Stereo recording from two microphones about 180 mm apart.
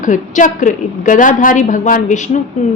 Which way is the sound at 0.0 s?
45° left (ahead or behind).